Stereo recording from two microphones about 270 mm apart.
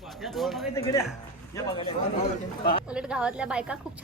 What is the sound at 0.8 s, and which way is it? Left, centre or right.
A man's voice, centre.